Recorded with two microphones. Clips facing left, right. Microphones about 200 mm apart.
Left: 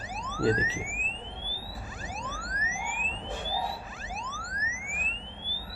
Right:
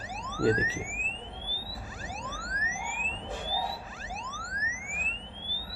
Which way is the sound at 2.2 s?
30° right (ahead or behind).